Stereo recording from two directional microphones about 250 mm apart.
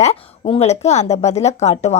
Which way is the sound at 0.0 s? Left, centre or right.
Left.